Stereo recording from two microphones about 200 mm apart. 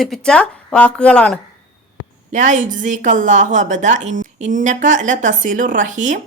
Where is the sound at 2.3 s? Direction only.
40° right (ahead or behind).